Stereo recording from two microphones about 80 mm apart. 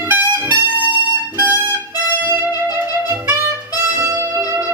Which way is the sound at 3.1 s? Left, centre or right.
Right.